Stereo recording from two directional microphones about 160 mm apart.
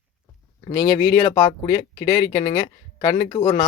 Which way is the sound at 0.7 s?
25° left (ahead or behind).